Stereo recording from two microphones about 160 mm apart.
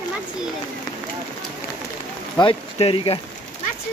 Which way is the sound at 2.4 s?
35° left (ahead or behind).